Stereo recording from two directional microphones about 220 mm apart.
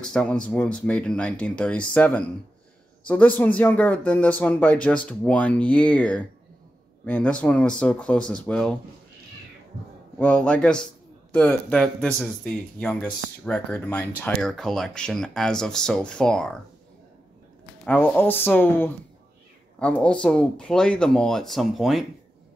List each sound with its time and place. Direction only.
0.0 s speech: 5° left (ahead or behind)
10.1 s speech: 5° left (ahead or behind)
17.8 s speech: 5° left (ahead or behind)